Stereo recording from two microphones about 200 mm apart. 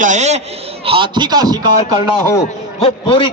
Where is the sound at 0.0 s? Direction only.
35° right (ahead or behind); by 1.6 s 20° right (ahead or behind).